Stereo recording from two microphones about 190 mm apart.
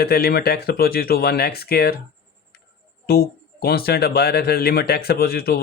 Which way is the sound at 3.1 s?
55° left (ahead or behind).